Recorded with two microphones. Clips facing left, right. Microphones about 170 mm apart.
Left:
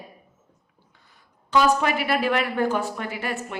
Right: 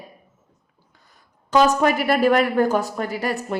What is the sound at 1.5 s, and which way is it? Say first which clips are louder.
A woman's voice: right 3 dB; 45° right (ahead or behind).